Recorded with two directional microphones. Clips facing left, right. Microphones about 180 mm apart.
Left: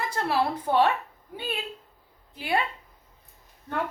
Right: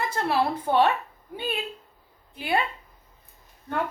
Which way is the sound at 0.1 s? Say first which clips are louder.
Even; 25° right (ahead or behind).